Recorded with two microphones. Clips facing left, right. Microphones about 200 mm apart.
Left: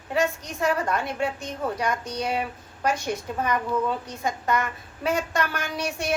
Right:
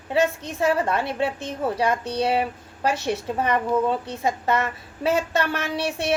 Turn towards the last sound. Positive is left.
turn(degrees=-30)  # may be behind; listen again after turning